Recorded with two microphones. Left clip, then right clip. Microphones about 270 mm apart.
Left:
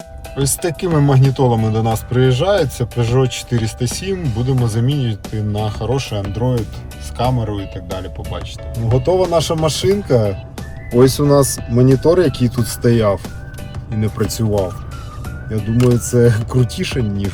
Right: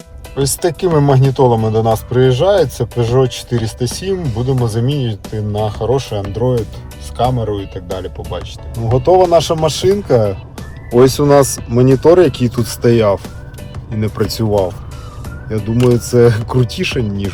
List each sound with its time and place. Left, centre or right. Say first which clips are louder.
0.3 s speech: right 4 dB; centre
4.9 s speech: right 2 dB; right
5.2 s speech: right 4 dB; centre
5.8 s speech: right 5 dB; centre
7.2 s speech: right 4 dB; centre